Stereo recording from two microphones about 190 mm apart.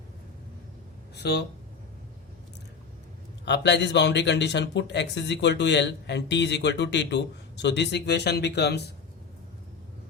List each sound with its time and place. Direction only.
1.1 s speech: 60° left (ahead or behind)
3.4 s speech: 65° left (ahead or behind)